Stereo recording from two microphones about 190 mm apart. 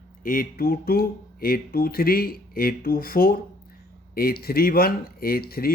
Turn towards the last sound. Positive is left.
turn(degrees=50)  # may be behind; listen again after turning